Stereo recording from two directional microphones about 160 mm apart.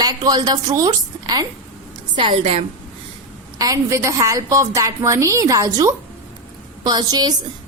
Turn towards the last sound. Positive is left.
turn(degrees=-25)  # may be behind; listen again after turning